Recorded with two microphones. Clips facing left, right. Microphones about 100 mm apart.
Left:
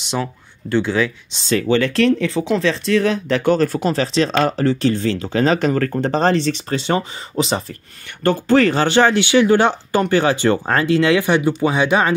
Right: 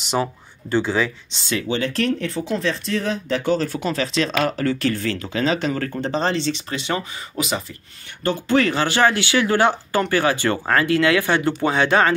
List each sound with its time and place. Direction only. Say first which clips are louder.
0.7 s speech: left 2 dB; 5° right (ahead or behind)
1.7 s speech: left 7 dB; 75° left (ahead or behind); by 3.8 s 50° left (ahead or behind)
3.8 s speech: left 4 dB; 35° left (ahead or behind)
5.4 s speech: left 5 dB; 45° left (ahead or behind); by 7.6 s 30° left (ahead or behind)
8.1 s speech: left 4 dB; 60° left (ahead or behind)
8.5 s speech: left 4 dB; 35° left (ahead or behind); by 12.1 s 15° left (ahead or behind)